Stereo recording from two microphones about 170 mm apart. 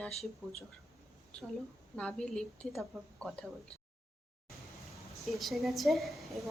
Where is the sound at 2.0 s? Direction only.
5° left (ahead or behind).